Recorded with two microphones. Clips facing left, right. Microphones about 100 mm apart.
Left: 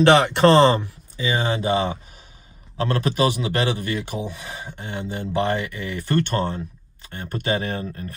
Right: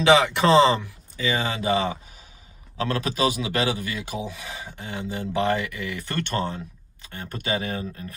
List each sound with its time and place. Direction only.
0.0 s a man's voice: 55° left (ahead or behind)
1.3 s a man's voice: 40° left (ahead or behind)